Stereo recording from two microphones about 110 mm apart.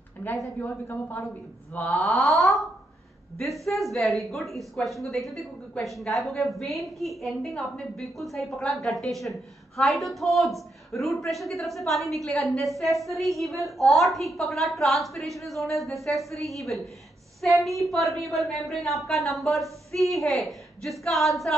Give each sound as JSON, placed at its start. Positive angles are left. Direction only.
{"t": 0.6, "sound": "speech", "side_deg": 20}
{"t": 2.0, "sound": "a woman's voice", "side_deg": 0}